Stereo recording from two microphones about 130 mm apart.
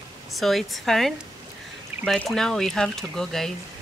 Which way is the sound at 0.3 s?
Centre (ahead or behind).